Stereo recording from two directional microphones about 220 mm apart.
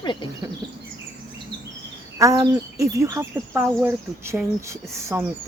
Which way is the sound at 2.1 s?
15° right (ahead or behind).